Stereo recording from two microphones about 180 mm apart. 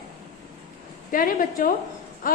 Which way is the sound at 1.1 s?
50° left (ahead or behind).